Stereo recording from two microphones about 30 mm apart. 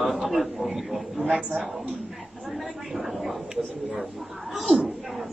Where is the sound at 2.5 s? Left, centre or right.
Centre.